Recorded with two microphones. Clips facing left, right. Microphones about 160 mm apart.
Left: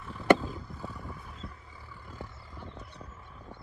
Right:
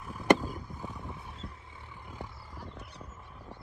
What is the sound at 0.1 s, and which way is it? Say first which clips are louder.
Vehicle: left 1 dB; 10° right (ahead or behind).